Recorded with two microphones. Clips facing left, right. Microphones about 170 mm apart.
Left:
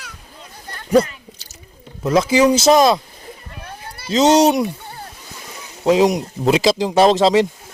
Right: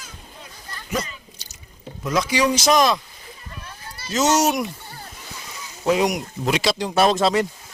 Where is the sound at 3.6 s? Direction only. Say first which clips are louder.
Left 5 dB; 60° left (ahead or behind).